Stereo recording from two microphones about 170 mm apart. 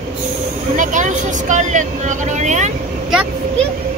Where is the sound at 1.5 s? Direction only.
45° right (ahead or behind).